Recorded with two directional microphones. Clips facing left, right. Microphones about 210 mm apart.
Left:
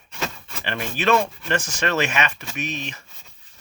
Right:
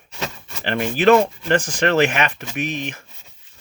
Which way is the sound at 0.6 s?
55° right (ahead or behind).